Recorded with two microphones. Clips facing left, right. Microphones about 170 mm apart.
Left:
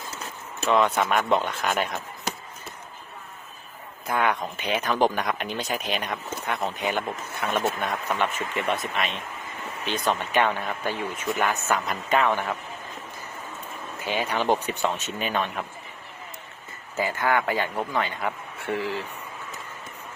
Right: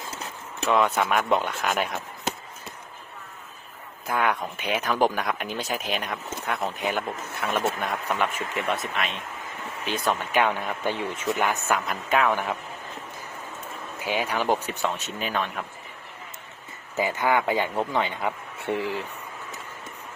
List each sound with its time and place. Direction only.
0.7 s speech: 5° right (ahead or behind)
4.0 s speech: centre (ahead or behind)
11.1 s speech: 25° right (ahead or behind)
11.7 s speech: 5° right (ahead or behind)
14.0 s speech: 10° right (ahead or behind)
17.0 s speech: 20° right (ahead or behind)